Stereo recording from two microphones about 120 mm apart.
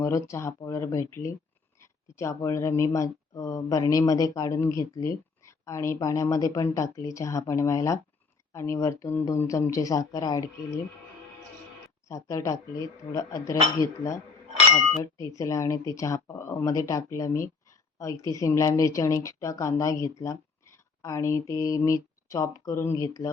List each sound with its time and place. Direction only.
0.0 s speech: 25° left (ahead or behind)
12.0 s speech: 25° left (ahead or behind)
15.2 s speech: 25° left (ahead or behind)